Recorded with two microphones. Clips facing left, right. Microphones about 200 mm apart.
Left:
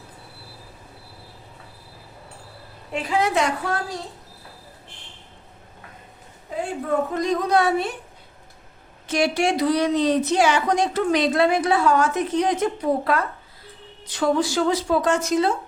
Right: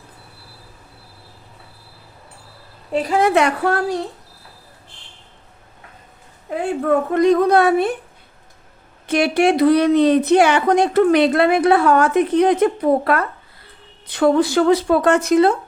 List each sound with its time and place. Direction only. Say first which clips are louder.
2.9 s a woman's voice: right 6 dB; 45° right (ahead or behind); by 3.9 s 60° right (ahead or behind)
6.5 s a woman's voice: right 7 dB; 65° right (ahead or behind)
9.0 s a woman's voice: right 5 dB; 60° right (ahead or behind)